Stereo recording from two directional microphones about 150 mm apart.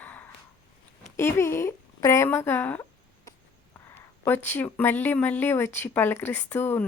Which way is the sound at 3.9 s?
15° left (ahead or behind).